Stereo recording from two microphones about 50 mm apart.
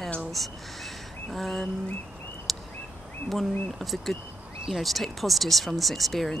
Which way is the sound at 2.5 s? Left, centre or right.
Centre.